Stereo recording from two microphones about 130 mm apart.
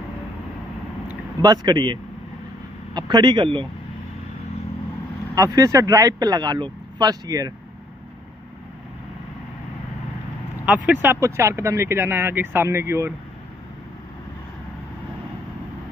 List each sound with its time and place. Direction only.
1.4 s speech: 30° right (ahead or behind)
5.3 s speech: 25° right (ahead or behind)
10.6 s speech: 10° right (ahead or behind)